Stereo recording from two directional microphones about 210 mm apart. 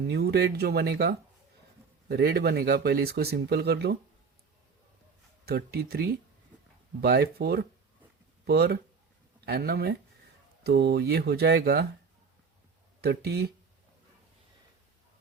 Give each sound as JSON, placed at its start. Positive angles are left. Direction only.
{"t": 0.1, "sound": "speech", "side_deg": -50}
{"t": 5.5, "sound": "speech", "side_deg": -50}
{"t": 13.0, "sound": "speech", "side_deg": -50}